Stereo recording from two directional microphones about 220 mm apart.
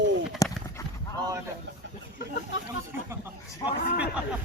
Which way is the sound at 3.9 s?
5° right (ahead or behind).